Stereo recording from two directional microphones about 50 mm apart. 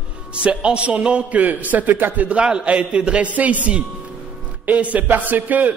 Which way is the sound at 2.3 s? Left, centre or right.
Right.